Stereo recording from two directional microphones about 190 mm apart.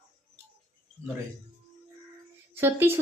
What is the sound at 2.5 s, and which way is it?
Speech, 10° right (ahead or behind).